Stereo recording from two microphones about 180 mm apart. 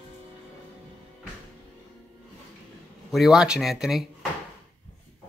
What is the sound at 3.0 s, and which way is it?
Speech, centre (ahead or behind).